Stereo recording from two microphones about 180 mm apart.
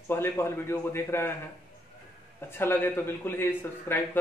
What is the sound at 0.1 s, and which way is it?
Speech, 15° left (ahead or behind).